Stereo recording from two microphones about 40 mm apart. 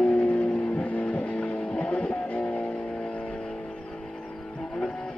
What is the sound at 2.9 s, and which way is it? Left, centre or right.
Vehicle, left.